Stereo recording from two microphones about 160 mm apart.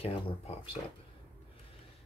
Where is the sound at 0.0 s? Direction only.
35° left (ahead or behind).